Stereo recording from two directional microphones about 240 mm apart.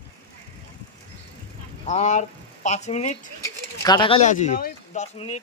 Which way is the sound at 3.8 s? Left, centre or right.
Centre.